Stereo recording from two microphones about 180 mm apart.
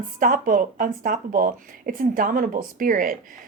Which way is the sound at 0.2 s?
50° right (ahead or behind).